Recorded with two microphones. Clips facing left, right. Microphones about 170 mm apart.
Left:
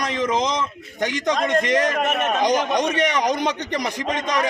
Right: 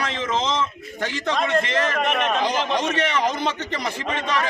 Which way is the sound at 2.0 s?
45° left (ahead or behind).